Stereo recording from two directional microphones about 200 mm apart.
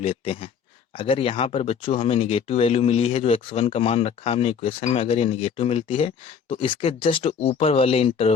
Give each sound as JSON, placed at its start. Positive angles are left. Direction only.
{"t": 0.0, "sound": "speech", "side_deg": 30}